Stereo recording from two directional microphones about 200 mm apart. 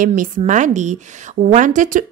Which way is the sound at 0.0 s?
40° right (ahead or behind).